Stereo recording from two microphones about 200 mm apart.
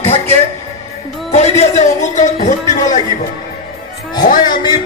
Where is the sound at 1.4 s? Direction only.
35° left (ahead or behind).